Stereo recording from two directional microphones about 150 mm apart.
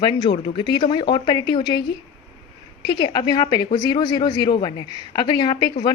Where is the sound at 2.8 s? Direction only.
30° left (ahead or behind).